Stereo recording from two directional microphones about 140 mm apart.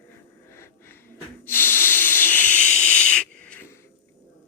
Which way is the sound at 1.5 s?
15° left (ahead or behind).